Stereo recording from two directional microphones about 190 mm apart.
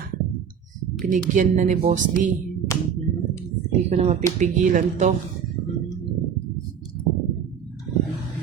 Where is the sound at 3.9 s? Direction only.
35° right (ahead or behind).